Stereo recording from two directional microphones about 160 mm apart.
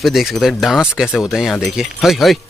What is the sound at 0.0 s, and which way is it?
Speech, centre (ahead or behind).